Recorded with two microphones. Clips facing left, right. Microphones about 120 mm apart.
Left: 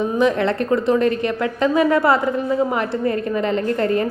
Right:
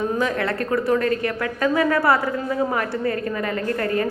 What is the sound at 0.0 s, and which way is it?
A woman's voice, 20° left (ahead or behind).